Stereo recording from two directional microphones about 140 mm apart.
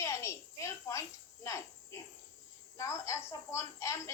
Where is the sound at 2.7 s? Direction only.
20° left (ahead or behind).